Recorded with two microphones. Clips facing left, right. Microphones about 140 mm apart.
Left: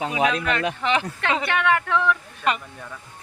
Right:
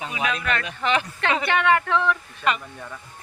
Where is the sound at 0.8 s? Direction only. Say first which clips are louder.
Right 2 dB; 20° left (ahead or behind).